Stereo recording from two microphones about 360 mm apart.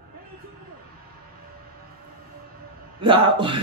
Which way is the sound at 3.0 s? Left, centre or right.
Centre.